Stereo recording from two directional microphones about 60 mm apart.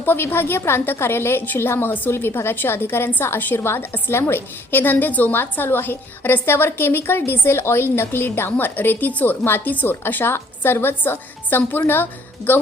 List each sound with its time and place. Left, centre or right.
0.0 s a woman's voice: left